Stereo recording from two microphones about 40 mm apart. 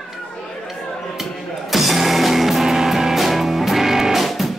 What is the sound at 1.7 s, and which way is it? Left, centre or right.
Music, centre.